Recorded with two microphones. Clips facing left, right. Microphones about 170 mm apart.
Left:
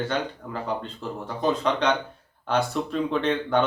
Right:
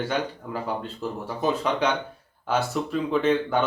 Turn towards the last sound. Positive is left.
turn(degrees=-5)  # may be behind; listen again after turning